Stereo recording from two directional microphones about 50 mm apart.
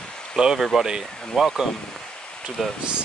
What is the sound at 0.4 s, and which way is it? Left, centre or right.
Speech, centre.